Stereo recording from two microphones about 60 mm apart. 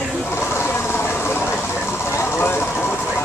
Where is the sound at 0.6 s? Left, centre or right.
Left.